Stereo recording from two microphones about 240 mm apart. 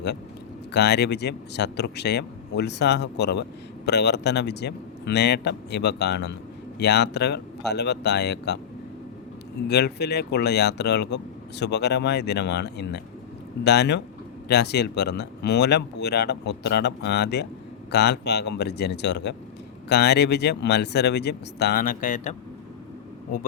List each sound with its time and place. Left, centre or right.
0.7 s speech: left
9.6 s speech: left